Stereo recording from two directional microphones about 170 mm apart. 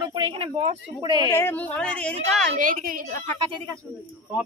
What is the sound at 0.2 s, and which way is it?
Speech, 35° right (ahead or behind).